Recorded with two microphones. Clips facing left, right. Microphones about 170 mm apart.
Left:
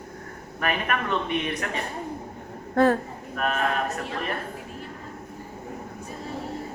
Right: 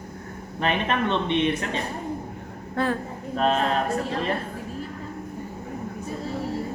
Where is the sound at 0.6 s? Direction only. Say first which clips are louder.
Right 3 dB; 25° right (ahead or behind).